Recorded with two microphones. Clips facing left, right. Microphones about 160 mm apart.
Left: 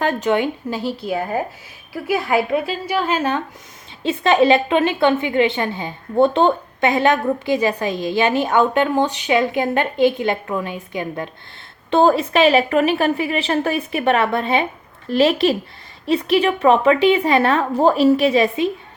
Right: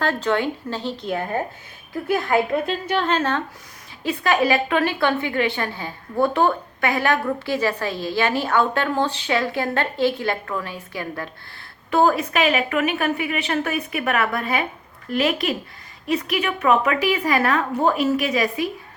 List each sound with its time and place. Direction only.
0.0 s speech: 15° left (ahead or behind)
4.0 s a woman's voice: 25° left (ahead or behind)